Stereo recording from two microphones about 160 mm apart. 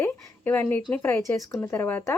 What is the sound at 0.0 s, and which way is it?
Speech, 15° left (ahead or behind).